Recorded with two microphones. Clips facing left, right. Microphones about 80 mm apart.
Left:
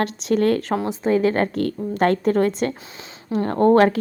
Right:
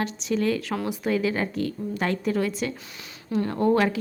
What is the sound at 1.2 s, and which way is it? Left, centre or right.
A woman's voice, left.